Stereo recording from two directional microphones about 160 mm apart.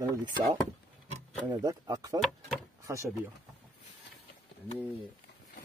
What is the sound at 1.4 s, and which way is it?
Speech, 20° right (ahead or behind).